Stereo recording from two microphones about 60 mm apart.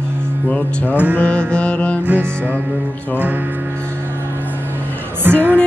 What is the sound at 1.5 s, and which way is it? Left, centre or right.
Music, centre.